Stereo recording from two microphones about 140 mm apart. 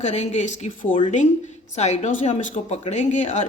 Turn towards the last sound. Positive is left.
turn(degrees=60)  # may be behind; listen again after turning